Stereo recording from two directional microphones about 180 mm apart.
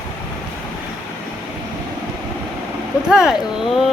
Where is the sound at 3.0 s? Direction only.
5° right (ahead or behind).